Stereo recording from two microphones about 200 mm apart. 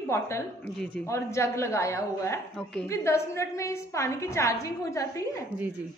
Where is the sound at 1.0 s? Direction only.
15° left (ahead or behind).